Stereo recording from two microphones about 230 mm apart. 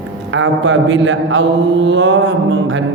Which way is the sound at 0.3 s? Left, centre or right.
Right.